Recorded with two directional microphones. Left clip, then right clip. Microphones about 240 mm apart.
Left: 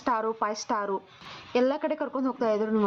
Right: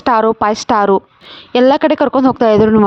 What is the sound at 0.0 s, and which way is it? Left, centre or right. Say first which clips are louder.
A woman's voice: right 16 dB; right.